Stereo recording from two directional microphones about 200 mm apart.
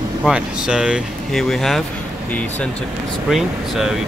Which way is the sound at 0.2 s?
5° right (ahead or behind).